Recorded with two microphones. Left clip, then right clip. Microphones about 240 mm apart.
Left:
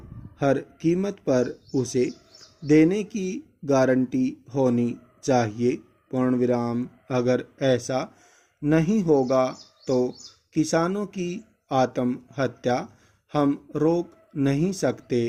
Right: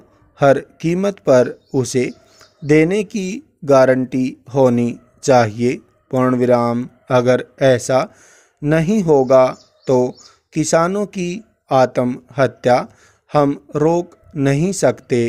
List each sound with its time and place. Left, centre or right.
0.3 s speech: right